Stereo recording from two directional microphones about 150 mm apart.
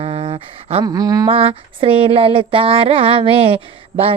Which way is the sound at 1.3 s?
40° right (ahead or behind).